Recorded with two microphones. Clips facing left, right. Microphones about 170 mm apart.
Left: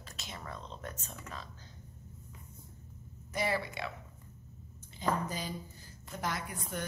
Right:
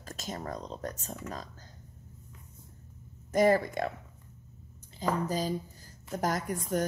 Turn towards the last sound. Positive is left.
turn(degrees=-40)  # may be behind; listen again after turning